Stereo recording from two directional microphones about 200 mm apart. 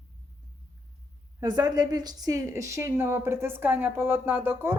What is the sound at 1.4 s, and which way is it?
Speech, 20° right (ahead or behind).